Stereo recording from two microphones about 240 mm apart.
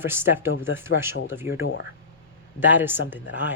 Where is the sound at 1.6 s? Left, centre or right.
Left.